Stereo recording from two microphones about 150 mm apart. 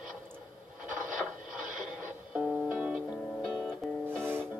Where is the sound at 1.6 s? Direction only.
60° right (ahead or behind).